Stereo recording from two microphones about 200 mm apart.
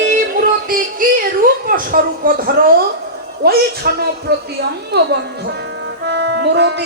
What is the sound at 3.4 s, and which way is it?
A man's voice, 50° right (ahead or behind).